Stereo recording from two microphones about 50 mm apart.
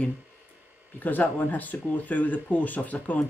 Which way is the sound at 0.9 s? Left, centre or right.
Left.